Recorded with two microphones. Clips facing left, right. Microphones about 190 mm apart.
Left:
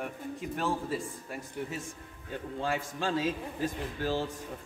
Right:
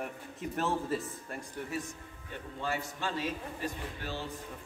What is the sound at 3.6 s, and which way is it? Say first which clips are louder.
Speech: left 9 dB; 45° left (ahead or behind).